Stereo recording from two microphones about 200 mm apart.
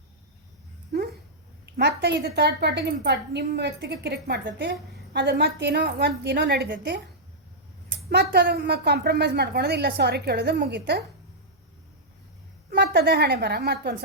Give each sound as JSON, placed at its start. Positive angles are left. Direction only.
{"t": 1.6, "sound": "a woman's voice", "side_deg": -55}
{"t": 8.1, "sound": "a woman's voice", "side_deg": -55}
{"t": 12.7, "sound": "a woman's voice", "side_deg": -55}